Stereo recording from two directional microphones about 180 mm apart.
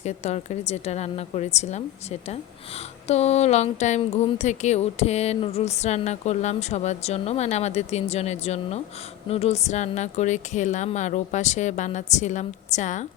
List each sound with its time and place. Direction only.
0.0 s speech: 40° left (ahead or behind)